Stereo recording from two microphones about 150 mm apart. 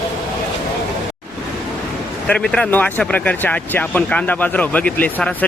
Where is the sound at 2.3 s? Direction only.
5° left (ahead or behind).